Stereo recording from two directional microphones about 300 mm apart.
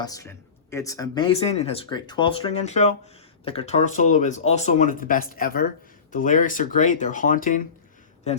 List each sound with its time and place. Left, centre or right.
0.0 s speech: centre